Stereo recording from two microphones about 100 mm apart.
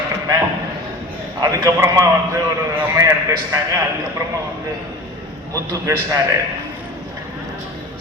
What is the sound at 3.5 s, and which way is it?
Speech, 30° right (ahead or behind).